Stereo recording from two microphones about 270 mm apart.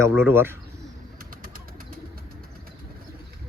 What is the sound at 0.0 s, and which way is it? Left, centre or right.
Speech, centre.